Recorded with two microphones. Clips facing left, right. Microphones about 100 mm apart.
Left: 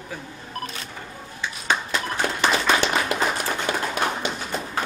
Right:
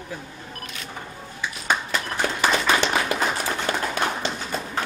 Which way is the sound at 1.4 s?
10° right (ahead or behind).